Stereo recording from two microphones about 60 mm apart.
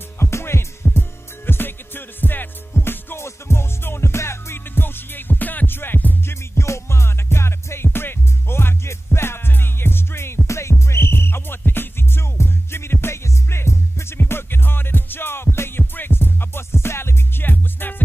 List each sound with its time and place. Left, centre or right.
0.2 s music: left
1.4 s music: left
6.6 s music: left